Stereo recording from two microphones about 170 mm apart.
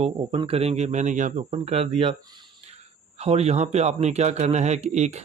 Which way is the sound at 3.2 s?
40° right (ahead or behind).